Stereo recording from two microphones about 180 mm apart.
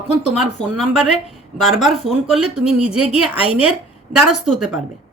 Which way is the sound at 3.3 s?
30° left (ahead or behind).